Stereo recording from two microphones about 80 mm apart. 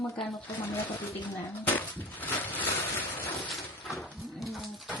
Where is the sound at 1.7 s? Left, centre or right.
Left.